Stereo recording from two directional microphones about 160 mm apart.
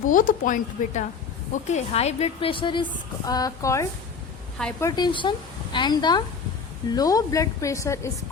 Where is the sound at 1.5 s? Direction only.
45° left (ahead or behind).